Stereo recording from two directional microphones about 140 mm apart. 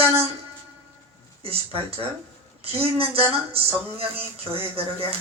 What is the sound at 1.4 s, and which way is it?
Speech, 45° right (ahead or behind).